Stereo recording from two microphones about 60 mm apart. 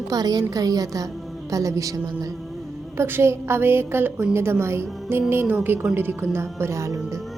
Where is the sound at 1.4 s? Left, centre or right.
Right.